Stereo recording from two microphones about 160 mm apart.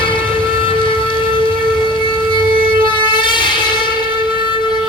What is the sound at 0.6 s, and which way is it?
Music, 30° left (ahead or behind).